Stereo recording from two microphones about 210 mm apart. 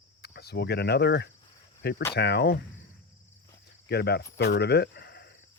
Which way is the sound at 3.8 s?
50° left (ahead or behind).